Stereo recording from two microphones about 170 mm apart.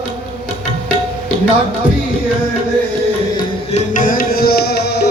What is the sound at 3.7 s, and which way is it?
Music, 50° left (ahead or behind).